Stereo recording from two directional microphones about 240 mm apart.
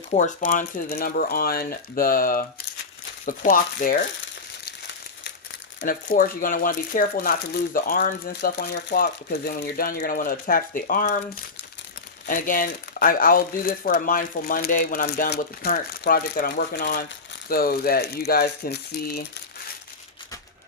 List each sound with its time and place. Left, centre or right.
0.1 s speech: left
4.6 s a sound: left
5.8 s speech: left
12.2 s speech: left